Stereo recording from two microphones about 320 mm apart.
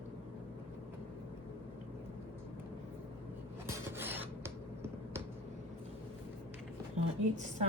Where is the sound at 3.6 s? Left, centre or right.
Centre.